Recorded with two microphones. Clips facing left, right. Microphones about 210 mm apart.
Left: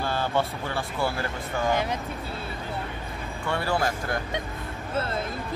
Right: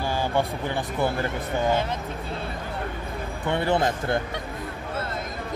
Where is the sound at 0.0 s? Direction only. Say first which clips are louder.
Right 1 dB; 15° right (ahead or behind).